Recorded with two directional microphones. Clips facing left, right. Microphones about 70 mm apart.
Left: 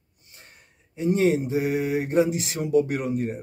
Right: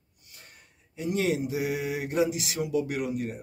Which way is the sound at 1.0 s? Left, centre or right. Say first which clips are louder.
Left 6 dB; left.